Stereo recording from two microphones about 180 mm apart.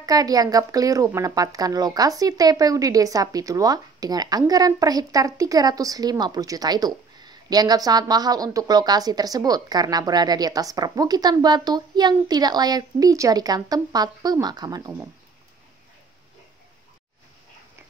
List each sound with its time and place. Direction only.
0.0 s speech: 20° right (ahead or behind)